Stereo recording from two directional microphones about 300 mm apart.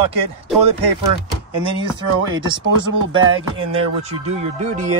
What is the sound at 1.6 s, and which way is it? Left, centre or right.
Speech, centre.